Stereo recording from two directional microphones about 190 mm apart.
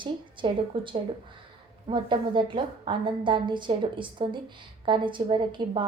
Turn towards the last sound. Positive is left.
turn(degrees=-25)  # may be behind; listen again after turning